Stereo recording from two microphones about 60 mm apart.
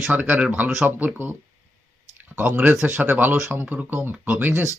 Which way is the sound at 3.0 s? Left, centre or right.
Right.